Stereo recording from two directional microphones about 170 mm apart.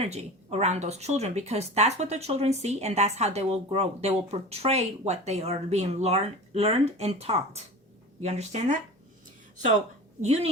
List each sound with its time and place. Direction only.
0.0 s speech: 40° right (ahead or behind)
10.2 s speech: 40° right (ahead or behind)